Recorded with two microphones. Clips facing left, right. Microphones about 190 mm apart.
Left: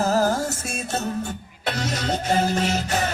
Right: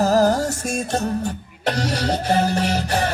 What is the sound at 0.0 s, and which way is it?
Music, 40° right (ahead or behind).